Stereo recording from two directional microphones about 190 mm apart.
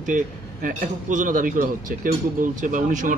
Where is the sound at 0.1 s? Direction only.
45° right (ahead or behind).